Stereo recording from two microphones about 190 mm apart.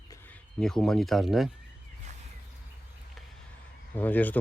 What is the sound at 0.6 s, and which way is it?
Speech, centre (ahead or behind).